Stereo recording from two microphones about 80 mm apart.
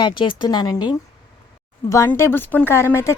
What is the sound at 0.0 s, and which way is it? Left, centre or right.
Speech, left.